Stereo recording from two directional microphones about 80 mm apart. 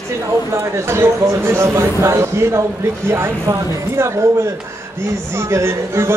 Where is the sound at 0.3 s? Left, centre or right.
Right.